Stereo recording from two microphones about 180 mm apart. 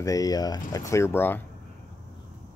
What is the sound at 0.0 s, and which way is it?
Speech, 20° left (ahead or behind).